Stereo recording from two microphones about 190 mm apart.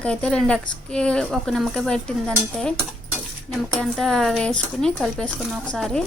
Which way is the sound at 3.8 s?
5° left (ahead or behind).